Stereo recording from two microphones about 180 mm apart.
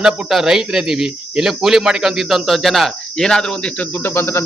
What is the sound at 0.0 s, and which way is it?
Speech, centre (ahead or behind).